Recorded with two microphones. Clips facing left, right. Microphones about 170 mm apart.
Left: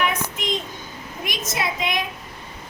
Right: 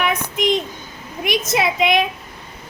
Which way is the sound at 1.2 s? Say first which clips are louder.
Right 8 dB; 70° right (ahead or behind).